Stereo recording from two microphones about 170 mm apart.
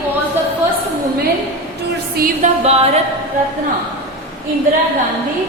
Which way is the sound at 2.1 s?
55° right (ahead or behind).